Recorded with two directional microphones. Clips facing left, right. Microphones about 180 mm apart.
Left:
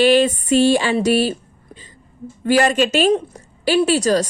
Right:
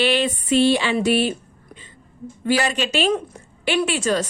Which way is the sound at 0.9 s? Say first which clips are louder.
Left 2 dB; 40° left (ahead or behind).